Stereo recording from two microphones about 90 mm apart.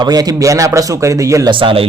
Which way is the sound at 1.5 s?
85° right.